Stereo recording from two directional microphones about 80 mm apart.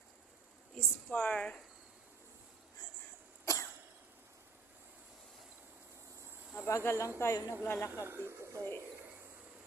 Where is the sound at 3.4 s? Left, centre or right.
Left.